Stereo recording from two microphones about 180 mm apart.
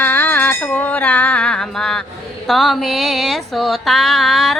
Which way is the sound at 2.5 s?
Centre (ahead or behind).